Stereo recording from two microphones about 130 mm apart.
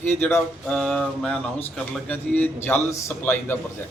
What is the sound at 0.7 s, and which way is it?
Speech, 5° left (ahead or behind).